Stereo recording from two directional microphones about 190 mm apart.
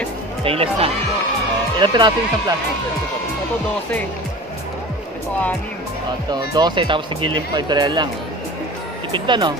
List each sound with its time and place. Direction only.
0.4 s speech: 30° right (ahead or behind)
6.3 s speech: 20° right (ahead or behind)
9.1 s speech: 25° right (ahead or behind)